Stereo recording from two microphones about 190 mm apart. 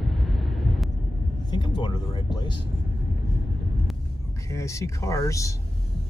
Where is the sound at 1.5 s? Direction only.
20° left (ahead or behind).